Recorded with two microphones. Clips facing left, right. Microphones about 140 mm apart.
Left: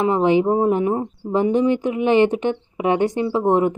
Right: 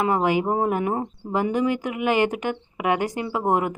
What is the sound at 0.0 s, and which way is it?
Speech, 25° left (ahead or behind).